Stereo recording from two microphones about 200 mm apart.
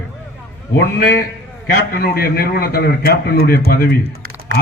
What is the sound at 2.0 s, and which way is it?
A man's voice, 50° left (ahead or behind).